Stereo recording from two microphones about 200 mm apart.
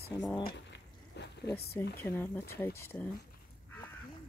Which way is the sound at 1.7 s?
10° left (ahead or behind).